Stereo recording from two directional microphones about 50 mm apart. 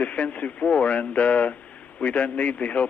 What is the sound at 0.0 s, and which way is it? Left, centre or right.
Speech, left.